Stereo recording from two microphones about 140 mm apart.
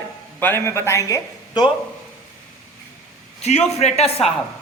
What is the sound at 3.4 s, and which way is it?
Speech, 50° left (ahead or behind).